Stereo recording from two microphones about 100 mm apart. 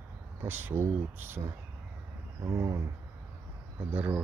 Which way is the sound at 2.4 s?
30° right (ahead or behind).